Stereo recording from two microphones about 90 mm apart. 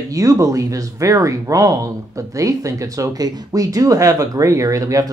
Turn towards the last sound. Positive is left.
turn(degrees=-40)  # may be behind; listen again after turning